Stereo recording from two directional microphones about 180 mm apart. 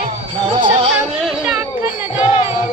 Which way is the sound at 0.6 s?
30° right (ahead or behind).